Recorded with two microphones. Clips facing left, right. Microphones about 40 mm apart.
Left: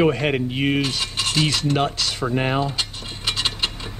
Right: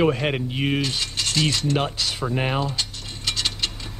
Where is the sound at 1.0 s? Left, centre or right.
Centre.